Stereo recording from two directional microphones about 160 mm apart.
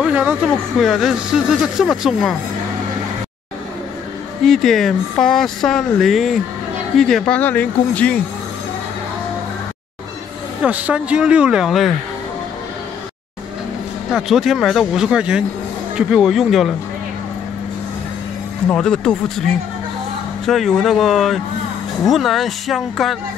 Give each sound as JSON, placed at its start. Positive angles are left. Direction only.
{"t": 0.0, "sound": "speech", "side_deg": -10}
{"t": 4.5, "sound": "speech", "side_deg": 0}
{"t": 10.6, "sound": "speech", "side_deg": -10}
{"t": 14.1, "sound": "speech", "side_deg": 0}
{"t": 18.7, "sound": "speech", "side_deg": 5}